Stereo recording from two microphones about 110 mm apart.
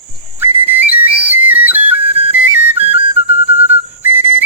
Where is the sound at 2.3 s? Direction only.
15° right (ahead or behind).